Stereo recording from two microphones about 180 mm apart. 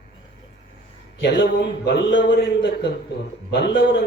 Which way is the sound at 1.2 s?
75° left (ahead or behind).